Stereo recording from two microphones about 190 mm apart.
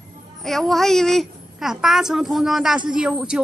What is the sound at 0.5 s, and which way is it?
A woman's voice, centre (ahead or behind).